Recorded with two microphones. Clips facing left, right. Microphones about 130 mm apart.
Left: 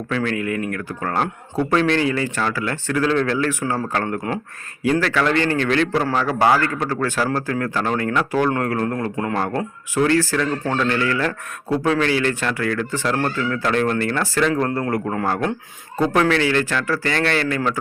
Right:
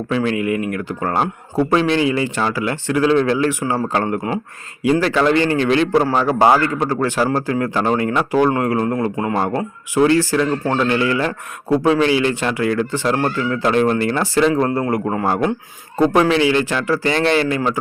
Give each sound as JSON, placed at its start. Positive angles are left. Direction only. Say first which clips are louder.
{"t": 0.1, "sound": "a man's voice", "louder": "right 4 dB", "side_deg": -15}